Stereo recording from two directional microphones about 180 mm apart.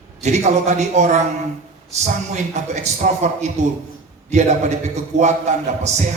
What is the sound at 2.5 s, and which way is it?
Speech, 40° right (ahead or behind).